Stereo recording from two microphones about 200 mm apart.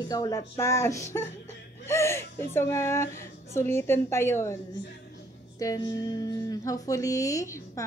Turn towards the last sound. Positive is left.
turn(degrees=15)  # may be behind; listen again after turning